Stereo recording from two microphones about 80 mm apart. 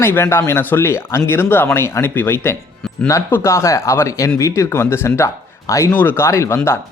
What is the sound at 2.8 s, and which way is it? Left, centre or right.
Music, centre.